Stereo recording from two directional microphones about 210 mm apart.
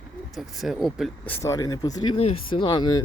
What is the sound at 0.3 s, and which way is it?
Speech, centre (ahead or behind).